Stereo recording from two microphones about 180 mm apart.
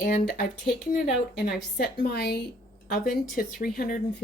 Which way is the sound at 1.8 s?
60° left (ahead or behind).